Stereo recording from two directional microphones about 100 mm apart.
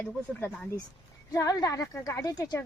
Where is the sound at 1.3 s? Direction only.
40° left (ahead or behind).